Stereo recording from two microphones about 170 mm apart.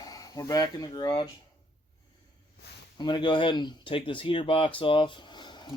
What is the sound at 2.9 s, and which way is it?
Speech, 25° left (ahead or behind).